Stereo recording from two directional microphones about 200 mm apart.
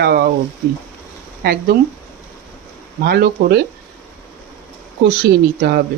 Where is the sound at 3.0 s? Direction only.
50° right (ahead or behind).